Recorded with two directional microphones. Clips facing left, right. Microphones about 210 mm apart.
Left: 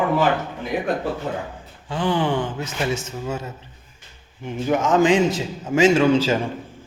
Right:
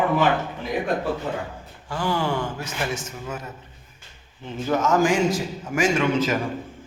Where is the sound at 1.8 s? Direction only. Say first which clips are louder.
Left 3 dB; 20° left (ahead or behind).